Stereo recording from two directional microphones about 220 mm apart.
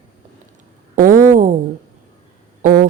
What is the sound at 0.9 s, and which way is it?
Speech, 40° right (ahead or behind).